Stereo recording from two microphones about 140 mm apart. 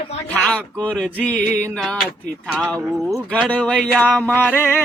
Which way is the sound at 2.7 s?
5° left (ahead or behind).